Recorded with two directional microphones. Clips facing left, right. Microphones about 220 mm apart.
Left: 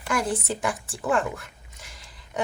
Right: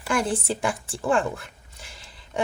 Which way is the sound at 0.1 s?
30° right (ahead or behind).